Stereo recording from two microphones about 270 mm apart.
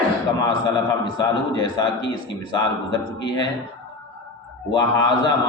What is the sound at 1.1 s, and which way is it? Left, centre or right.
A man's voice, centre.